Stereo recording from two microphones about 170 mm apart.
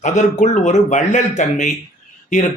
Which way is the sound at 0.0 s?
45° left (ahead or behind).